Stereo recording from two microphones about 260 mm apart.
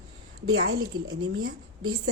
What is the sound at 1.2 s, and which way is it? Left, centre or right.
Speech, right.